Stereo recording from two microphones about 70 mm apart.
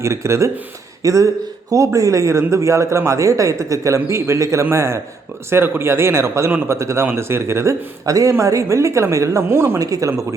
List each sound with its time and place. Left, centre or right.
0.0 s speech: right
9.7 s speech: right